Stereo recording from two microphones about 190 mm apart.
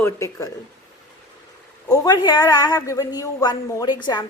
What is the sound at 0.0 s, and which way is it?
Speech, 15° left (ahead or behind).